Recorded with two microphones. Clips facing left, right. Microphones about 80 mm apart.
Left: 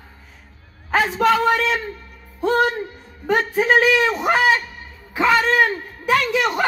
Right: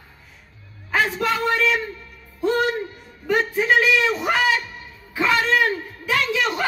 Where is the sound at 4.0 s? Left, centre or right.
Left.